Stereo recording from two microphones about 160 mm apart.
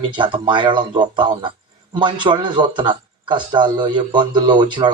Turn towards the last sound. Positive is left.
turn(degrees=-30)  # may be behind; listen again after turning